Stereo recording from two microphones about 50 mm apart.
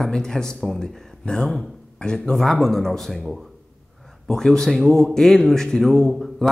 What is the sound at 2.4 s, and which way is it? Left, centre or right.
Speech, centre.